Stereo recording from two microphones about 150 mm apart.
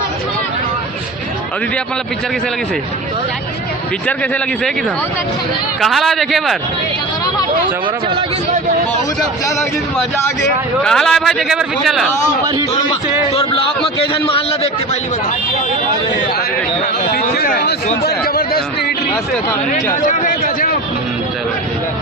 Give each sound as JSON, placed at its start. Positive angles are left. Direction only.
{"t": 4.0, "sound": "a man's voice", "side_deg": 5}
{"t": 5.8, "sound": "a man's voice", "side_deg": 0}
{"t": 10.8, "sound": "a man's voice", "side_deg": 5}
{"t": 13.3, "sound": "a man's voice", "side_deg": 40}
{"t": 17.3, "sound": "speech", "side_deg": 85}
{"t": 20.1, "sound": "a man's voice", "side_deg": 65}